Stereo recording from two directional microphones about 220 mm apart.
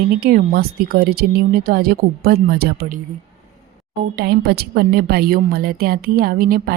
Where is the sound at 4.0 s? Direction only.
45° right (ahead or behind).